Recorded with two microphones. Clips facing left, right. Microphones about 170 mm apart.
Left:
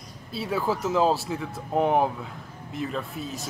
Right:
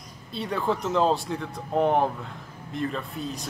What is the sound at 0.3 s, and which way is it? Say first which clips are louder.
Speech: even; 5° left (ahead or behind).